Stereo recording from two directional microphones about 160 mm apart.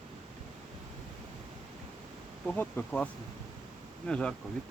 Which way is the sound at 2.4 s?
10° left (ahead or behind).